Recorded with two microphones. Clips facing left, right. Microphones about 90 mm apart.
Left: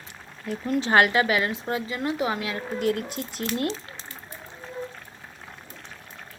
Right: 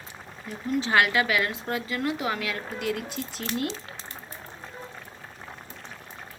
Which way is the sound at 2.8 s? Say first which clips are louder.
Left 4 dB; 50° left (ahead or behind).